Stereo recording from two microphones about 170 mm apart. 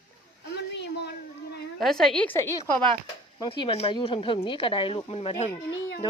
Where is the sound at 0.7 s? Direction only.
85° left.